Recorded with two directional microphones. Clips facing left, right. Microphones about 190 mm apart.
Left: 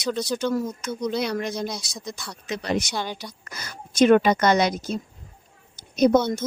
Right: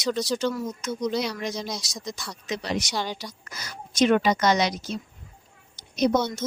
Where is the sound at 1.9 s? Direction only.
5° left (ahead or behind).